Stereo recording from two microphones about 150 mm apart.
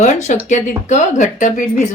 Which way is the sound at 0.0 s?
50° left (ahead or behind).